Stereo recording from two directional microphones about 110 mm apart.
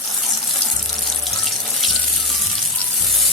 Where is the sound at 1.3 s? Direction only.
Centre (ahead or behind).